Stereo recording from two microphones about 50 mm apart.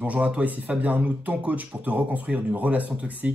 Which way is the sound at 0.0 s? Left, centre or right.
Right.